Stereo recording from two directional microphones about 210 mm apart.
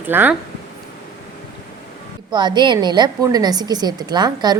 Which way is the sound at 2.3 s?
20° right (ahead or behind).